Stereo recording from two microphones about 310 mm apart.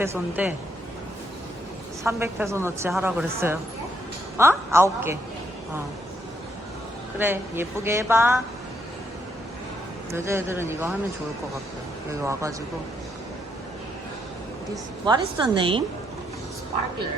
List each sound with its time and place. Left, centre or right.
0.0 s a woman's voice: centre
2.0 s a woman's voice: centre
7.2 s a woman's voice: centre
10.1 s a woman's voice: centre
12.2 s a woman's voice: centre
15.0 s a woman's voice: centre